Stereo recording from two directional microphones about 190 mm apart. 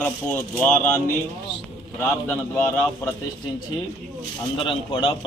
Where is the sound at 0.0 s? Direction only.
10° left (ahead or behind).